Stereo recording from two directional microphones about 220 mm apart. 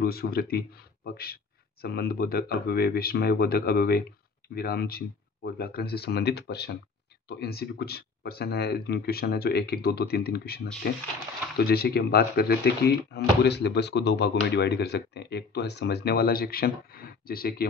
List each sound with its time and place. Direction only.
0.0 s speech: 45° left (ahead or behind)